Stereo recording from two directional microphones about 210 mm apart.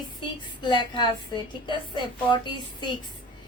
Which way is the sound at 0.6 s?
20° left (ahead or behind).